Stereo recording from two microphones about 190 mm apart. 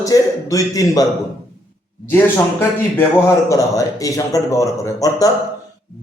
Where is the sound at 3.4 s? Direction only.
15° left (ahead or behind).